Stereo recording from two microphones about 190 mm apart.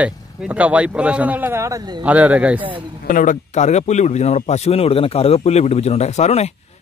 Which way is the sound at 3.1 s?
45° left (ahead or behind).